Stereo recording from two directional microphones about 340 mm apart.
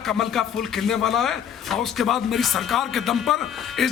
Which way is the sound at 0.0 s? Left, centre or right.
Centre.